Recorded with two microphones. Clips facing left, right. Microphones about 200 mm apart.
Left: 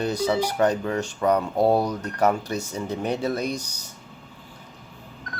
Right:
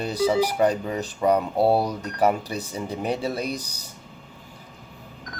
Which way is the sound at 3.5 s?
35° right (ahead or behind).